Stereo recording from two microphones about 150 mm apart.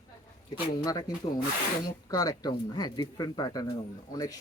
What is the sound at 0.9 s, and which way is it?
Speech, 25° left (ahead or behind).